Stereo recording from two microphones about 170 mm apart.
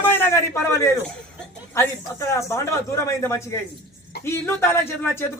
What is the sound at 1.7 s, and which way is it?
Speech, 15° left (ahead or behind).